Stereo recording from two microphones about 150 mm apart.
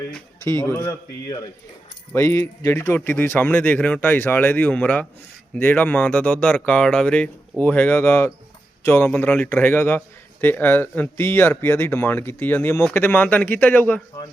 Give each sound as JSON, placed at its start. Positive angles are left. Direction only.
{"t": 0.6, "sound": "a man's voice", "side_deg": 20}